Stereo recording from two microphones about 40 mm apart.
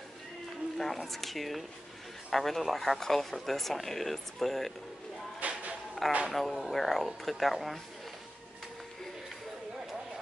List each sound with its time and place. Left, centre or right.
0.7 s speech: centre
5.4 s a sound: right
6.0 s speech: centre